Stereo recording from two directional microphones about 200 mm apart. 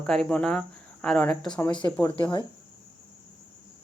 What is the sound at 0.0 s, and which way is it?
Speech, 5° left (ahead or behind).